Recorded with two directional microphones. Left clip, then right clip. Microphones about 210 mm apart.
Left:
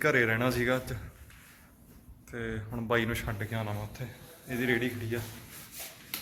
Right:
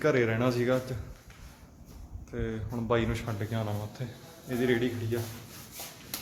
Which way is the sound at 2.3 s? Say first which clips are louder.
Right 1 dB; centre (ahead or behind).